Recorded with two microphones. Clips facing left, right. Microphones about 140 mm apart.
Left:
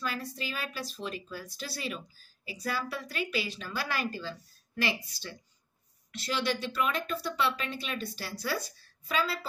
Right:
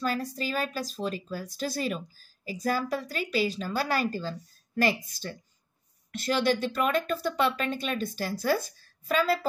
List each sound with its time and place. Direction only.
0.0 s a woman's voice: 40° right (ahead or behind)